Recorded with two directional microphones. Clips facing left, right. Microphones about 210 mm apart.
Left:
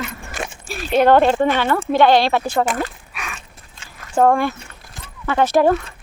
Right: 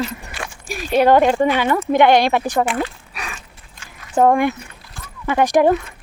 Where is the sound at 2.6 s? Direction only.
40° left (ahead or behind).